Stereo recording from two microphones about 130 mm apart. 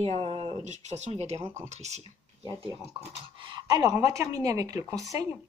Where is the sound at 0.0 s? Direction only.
50° right (ahead or behind).